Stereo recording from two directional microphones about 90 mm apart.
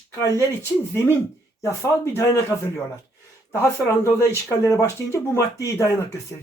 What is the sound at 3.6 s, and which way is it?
Speech, 30° left (ahead or behind).